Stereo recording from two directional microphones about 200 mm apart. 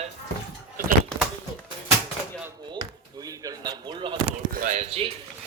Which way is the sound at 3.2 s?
20° right (ahead or behind).